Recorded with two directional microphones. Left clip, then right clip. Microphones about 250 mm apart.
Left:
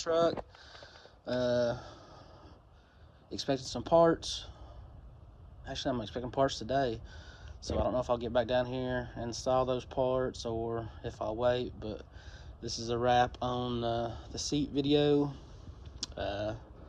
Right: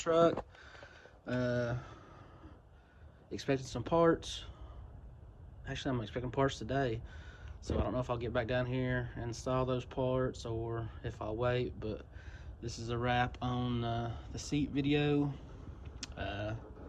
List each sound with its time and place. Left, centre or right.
0.0 s a sound: centre
3.2 s speech: centre
5.6 s speech: centre
16.0 s typing: centre